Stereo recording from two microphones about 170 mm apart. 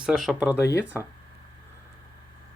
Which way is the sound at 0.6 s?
15° left (ahead or behind).